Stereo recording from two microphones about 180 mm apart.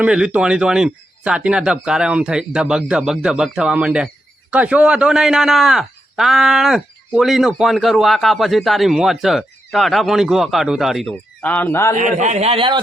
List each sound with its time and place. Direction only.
0.0 s speech: 5° right (ahead or behind); by 11.9 s 15° left (ahead or behind)
11.9 s a man's voice: 45° right (ahead or behind)